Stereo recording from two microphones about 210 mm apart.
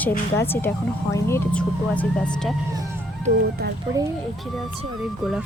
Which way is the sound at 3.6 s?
45° right (ahead or behind).